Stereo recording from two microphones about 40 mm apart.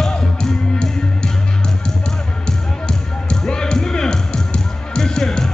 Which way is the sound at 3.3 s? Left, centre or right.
Left.